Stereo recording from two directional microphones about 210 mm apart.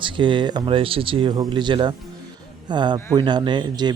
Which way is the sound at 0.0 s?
25° right (ahead or behind).